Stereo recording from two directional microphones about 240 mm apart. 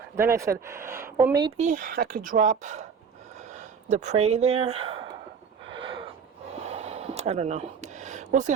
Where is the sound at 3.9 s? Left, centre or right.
Right.